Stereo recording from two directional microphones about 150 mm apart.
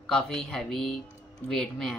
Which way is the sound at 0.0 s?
5° left (ahead or behind).